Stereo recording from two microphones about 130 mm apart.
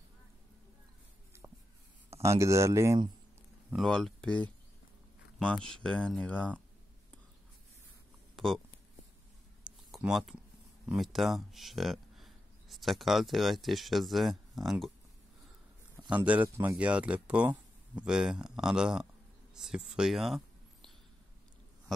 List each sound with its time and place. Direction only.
2.2 s speech: 20° right (ahead or behind)
3.7 s speech: 5° left (ahead or behind)
8.4 s speech: centre (ahead or behind)
9.6 s a sound: 5° right (ahead or behind)
10.9 s speech: centre (ahead or behind)
16.2 s speech: 15° right (ahead or behind); by 20.9 s centre (ahead or behind)